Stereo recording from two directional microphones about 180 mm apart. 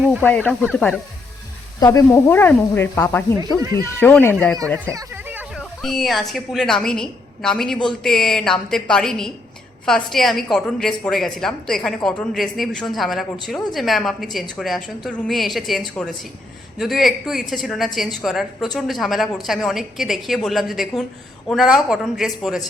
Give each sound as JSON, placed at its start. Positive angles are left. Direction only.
{"t": 0.2, "sound": "speech", "side_deg": 10}
{"t": 1.8, "sound": "speech", "side_deg": 15}
{"t": 3.6, "sound": "speech", "side_deg": -20}
{"t": 4.0, "sound": "speech", "side_deg": 10}
{"t": 4.9, "sound": "a sound", "side_deg": -15}
{"t": 5.8, "sound": "speech", "side_deg": 0}